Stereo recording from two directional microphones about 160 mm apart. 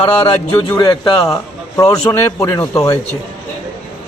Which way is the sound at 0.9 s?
35° left (ahead or behind).